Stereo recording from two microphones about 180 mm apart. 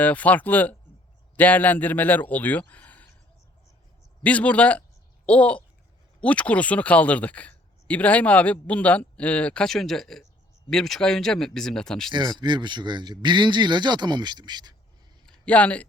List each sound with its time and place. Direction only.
0.0 s speech: 10° left (ahead or behind)
4.2 s speech: 10° left (ahead or behind)
12.1 s speech: 25° right (ahead or behind)
15.3 s speech: 5° left (ahead or behind)